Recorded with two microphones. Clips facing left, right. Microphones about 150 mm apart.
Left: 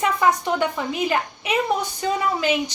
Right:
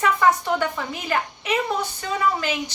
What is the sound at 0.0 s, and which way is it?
A woman's voice, 15° left (ahead or behind).